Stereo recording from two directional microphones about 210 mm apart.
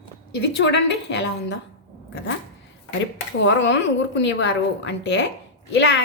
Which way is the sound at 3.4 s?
60° left (ahead or behind).